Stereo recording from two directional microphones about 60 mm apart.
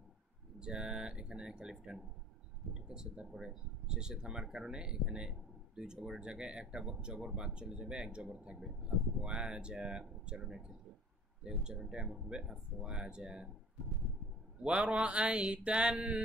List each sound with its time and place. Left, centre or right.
0.6 s speech: centre
14.6 s speech: centre